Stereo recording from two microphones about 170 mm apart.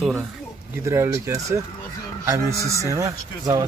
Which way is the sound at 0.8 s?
15° right (ahead or behind).